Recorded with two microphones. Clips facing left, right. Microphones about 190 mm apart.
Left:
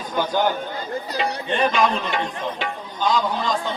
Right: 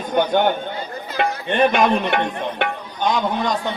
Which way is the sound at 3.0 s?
20° right (ahead or behind).